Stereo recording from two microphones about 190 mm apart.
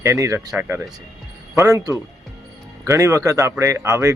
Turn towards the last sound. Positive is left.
turn(degrees=-15)  # may be behind; listen again after turning